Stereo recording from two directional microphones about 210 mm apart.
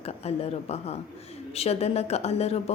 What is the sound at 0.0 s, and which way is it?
A woman's voice, 30° left (ahead or behind).